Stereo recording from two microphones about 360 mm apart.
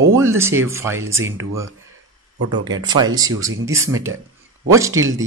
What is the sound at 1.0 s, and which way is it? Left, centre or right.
Speech, right.